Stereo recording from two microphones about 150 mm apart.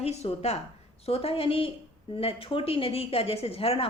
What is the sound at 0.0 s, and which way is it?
A woman's voice, 45° left (ahead or behind).